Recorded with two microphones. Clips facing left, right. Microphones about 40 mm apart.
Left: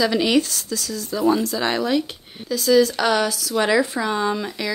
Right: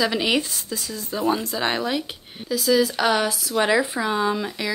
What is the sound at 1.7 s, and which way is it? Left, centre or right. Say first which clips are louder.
Speech: left 3 dB; centre.